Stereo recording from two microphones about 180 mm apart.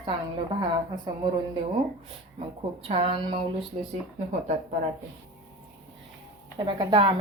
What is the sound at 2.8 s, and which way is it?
Speech, 30° right (ahead or behind).